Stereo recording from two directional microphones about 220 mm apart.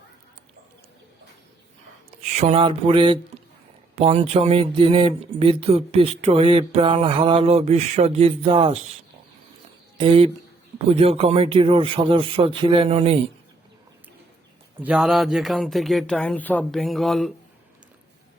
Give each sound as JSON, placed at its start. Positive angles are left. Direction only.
{"t": 2.2, "sound": "speech", "side_deg": -30}
{"t": 10.0, "sound": "speech", "side_deg": -25}
{"t": 14.8, "sound": "speech", "side_deg": -5}